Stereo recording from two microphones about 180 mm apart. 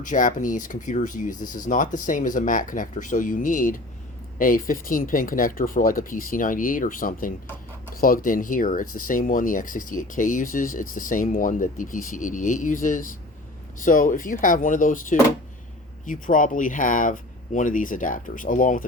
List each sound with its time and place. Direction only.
0.0 s speech: 45° left (ahead or behind)